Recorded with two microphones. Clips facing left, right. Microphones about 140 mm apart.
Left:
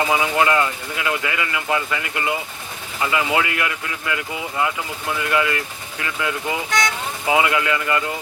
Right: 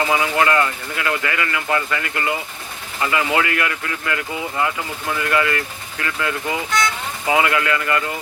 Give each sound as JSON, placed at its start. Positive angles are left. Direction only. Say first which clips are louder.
{"t": 0.0, "sound": "speech", "louder": "even", "side_deg": 10}